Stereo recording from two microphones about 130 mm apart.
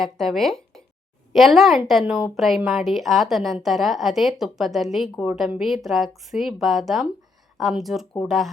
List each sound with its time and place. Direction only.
0.0 s a woman's voice: centre (ahead or behind)